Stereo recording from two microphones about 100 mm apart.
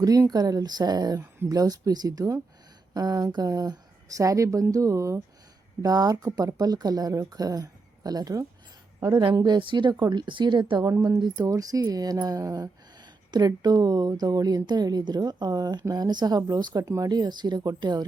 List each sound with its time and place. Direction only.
0.0 s speech: 40° right (ahead or behind)
9.4 s a woman's voice: 50° right (ahead or behind)
11.2 s a woman's voice: 40° right (ahead or behind)